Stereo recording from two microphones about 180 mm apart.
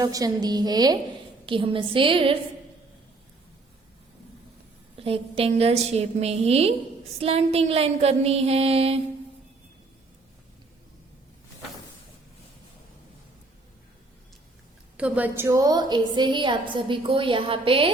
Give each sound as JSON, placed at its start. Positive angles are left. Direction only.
{"t": 0.0, "sound": "a woman's voice", "side_deg": -20}
{"t": 4.9, "sound": "a woman's voice", "side_deg": -30}
{"t": 14.9, "sound": "a woman's voice", "side_deg": -5}